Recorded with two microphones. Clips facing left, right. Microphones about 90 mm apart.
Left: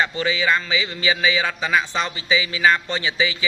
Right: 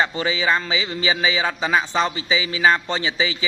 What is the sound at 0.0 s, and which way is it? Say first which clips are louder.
A man's voice: even; 30° right (ahead or behind).